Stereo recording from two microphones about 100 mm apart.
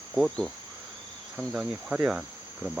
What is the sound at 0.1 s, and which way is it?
Speech, centre (ahead or behind).